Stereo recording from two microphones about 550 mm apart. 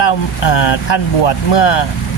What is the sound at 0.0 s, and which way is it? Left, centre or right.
Speech, left.